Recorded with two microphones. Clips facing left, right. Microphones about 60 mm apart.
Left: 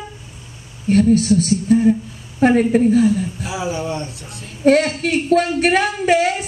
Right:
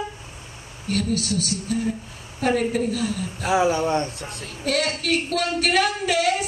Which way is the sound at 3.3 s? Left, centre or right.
Right.